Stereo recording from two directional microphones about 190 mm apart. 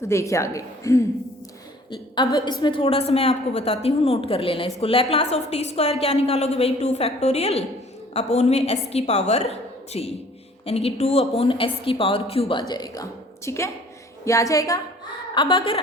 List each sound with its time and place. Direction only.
0.0 s a woman's voice: 15° left (ahead or behind)